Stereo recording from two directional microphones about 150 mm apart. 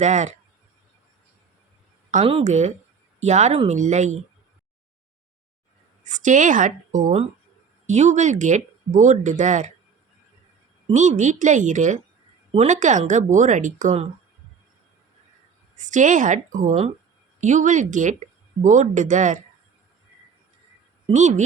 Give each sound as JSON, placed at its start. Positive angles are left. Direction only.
{"t": 0.0, "sound": "speech", "side_deg": -50}
{"t": 2.2, "sound": "speech", "side_deg": -45}
{"t": 6.1, "sound": "speech", "side_deg": -55}
{"t": 10.9, "sound": "speech", "side_deg": -55}
{"t": 15.7, "sound": "speech", "side_deg": -55}
{"t": 21.1, "sound": "speech", "side_deg": -55}